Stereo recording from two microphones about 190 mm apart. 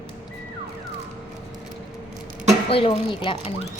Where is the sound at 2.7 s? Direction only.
30° left (ahead or behind).